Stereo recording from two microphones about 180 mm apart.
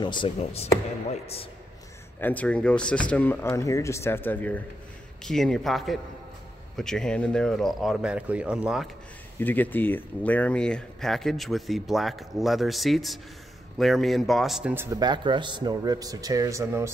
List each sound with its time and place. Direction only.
0.0 s a man's voice: 25° left (ahead or behind)
2.1 s speech: 10° left (ahead or behind)
9.4 s speech: 10° left (ahead or behind); by 15.0 s 10° right (ahead or behind)
15.0 s speech: 25° right (ahead or behind)